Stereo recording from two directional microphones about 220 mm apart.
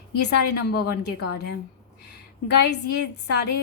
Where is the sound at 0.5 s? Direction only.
45° left (ahead or behind).